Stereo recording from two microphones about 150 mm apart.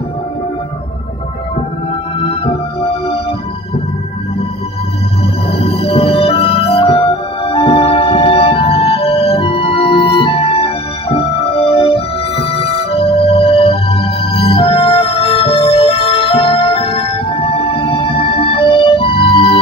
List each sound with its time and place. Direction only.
2.1 s music: 40° left (ahead or behind)
5.5 s music: 40° left (ahead or behind)